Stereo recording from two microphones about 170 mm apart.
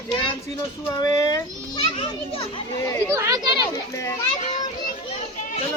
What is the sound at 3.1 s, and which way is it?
Speech, 20° right (ahead or behind).